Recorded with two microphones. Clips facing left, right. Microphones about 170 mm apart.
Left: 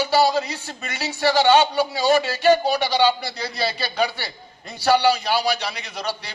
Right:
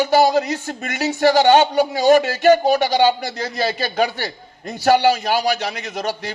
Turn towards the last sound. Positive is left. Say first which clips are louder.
# right 5 dB
turn(degrees=-45)  # may be behind; listen again after turning